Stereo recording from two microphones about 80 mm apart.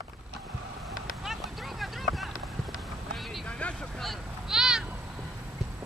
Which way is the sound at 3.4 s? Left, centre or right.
Centre.